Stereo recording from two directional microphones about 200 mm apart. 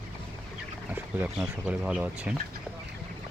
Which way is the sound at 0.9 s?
10° right (ahead or behind).